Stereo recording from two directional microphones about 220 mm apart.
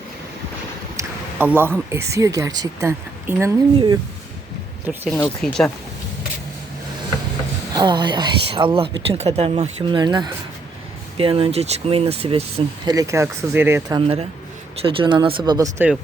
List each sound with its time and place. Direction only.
0.9 s a sound: 10° right (ahead or behind)
1.9 s speech: 15° right (ahead or behind)
4.9 s speech: 5° right (ahead or behind)
7.7 s speech: 20° right (ahead or behind)
14.8 s speech: 25° right (ahead or behind)